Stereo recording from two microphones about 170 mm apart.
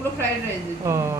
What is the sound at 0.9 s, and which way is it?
Speech, 15° right (ahead or behind).